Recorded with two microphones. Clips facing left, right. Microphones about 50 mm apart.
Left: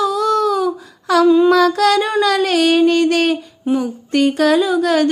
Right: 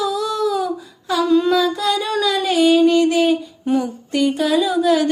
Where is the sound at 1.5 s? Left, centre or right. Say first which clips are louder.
Left 5 dB; left.